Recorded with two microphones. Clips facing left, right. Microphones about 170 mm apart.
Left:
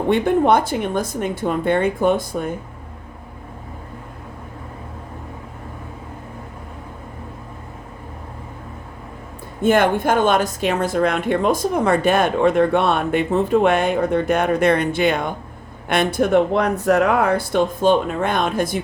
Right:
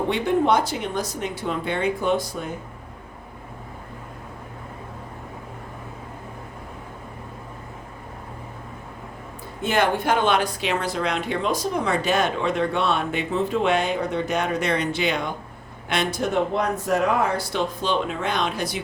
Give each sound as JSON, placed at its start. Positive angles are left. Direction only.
{"t": 0.1, "sound": "speech", "side_deg": 55}
{"t": 9.6, "sound": "speech", "side_deg": 50}